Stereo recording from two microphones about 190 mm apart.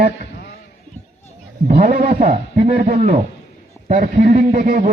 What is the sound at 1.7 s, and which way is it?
A man's voice, 45° right (ahead or behind).